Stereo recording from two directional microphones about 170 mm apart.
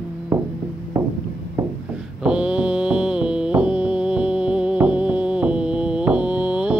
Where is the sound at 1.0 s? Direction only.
20° right (ahead or behind).